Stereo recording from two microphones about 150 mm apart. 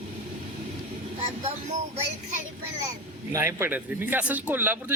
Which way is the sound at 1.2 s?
45° right (ahead or behind).